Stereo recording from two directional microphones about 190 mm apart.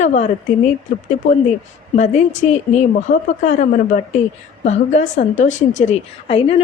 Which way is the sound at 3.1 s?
65° left (ahead or behind).